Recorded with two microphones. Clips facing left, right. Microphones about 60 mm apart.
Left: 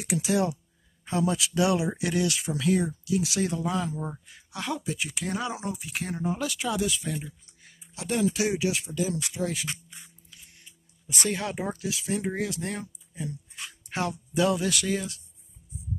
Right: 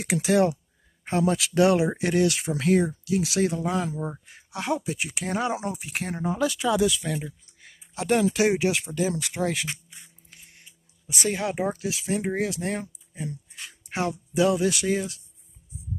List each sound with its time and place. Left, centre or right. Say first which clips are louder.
0.0 s speech: right 4 dB; right
3.9 s speech: right 3 dB; centre
5.2 s speech: right 5 dB; right
7.0 s speech: right 3 dB; right
11.1 s speech: right 3 dB; centre
11.6 s speech: right 4 dB; right
12.4 s speech: right 3 dB; right
13.8 s speech: right 2 dB; centre